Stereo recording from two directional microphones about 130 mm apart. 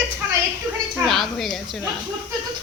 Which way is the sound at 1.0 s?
Centre (ahead or behind).